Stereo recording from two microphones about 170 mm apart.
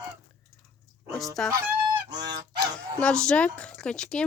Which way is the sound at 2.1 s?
25° right (ahead or behind).